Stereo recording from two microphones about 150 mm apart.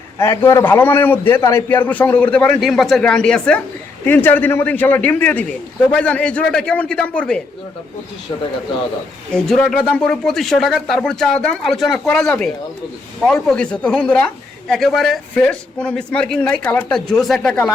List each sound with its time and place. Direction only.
0.2 s a man's voice: 15° left (ahead or behind)
9.3 s a man's voice: 5° left (ahead or behind)